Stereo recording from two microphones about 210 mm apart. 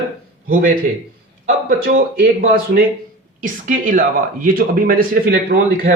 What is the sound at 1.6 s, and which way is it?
Speech, 40° right (ahead or behind).